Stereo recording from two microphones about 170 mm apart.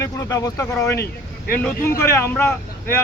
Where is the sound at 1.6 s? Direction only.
15° left (ahead or behind).